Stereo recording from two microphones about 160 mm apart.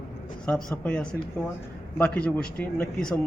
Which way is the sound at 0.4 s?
5° left (ahead or behind).